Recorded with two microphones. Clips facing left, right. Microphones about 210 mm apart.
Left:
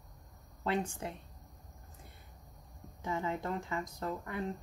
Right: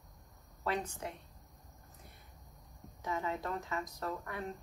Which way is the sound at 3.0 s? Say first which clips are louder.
Left 2 dB; 25° left (ahead or behind).